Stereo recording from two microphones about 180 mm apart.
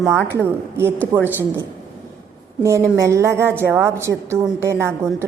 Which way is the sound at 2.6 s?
15° right (ahead or behind).